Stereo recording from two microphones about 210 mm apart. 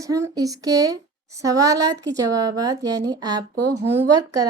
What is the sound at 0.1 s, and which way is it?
A woman's voice, 15° right (ahead or behind).